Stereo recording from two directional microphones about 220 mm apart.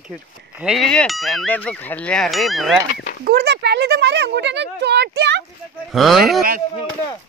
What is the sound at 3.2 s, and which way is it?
Speech, 50° right (ahead or behind).